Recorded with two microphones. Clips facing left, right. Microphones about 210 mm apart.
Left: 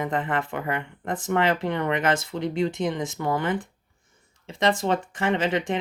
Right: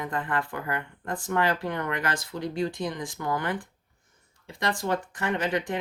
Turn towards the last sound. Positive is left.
turn(degrees=25)  # may be behind; listen again after turning